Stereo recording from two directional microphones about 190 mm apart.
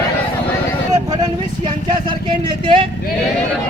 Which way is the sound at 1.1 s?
20° right (ahead or behind).